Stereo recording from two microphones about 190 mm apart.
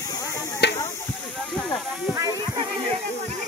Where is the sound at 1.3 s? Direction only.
Centre (ahead or behind).